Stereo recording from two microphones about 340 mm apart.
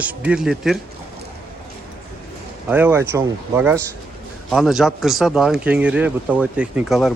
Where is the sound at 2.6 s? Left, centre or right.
Centre.